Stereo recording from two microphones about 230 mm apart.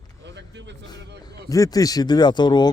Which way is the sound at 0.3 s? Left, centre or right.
Right.